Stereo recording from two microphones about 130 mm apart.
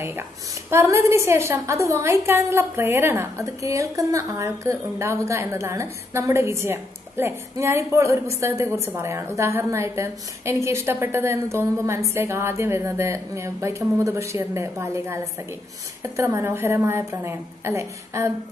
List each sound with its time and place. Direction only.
0.7 s a woman's voice: 20° right (ahead or behind)